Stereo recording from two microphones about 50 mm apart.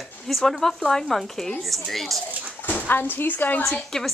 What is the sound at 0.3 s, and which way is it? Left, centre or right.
A man's voice, centre.